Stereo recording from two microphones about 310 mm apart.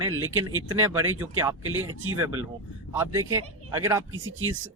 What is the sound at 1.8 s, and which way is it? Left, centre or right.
Speech, right.